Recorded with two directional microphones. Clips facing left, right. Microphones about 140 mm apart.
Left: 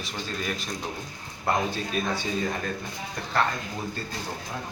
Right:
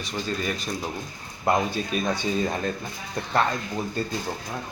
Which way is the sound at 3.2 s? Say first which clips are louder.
Right 7 dB; 25° right (ahead or behind).